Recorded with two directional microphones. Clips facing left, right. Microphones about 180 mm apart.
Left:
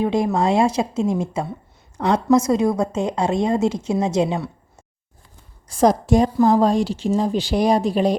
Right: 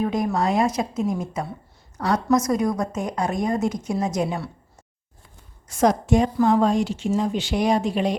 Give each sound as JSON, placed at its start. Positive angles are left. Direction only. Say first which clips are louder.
{"t": 0.0, "sound": "a woman's voice", "louder": "left 3 dB", "side_deg": 25}
{"t": 5.6, "sound": "a woman's voice", "louder": "left 3 dB", "side_deg": 35}